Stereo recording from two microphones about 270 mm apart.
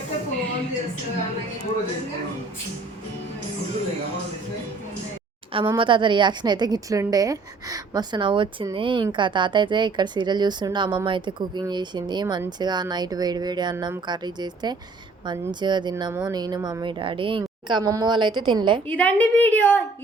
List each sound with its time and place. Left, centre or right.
5.5 s a woman's voice: centre
18.9 s a woman's voice: centre